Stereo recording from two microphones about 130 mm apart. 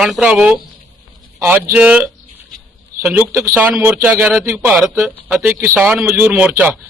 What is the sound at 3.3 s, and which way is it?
A man's voice, 25° right (ahead or behind).